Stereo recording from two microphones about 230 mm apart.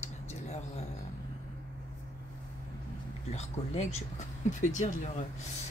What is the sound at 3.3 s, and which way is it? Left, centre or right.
Speech, left.